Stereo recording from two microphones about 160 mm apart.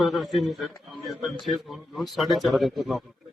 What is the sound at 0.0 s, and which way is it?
A man's voice, centre (ahead or behind).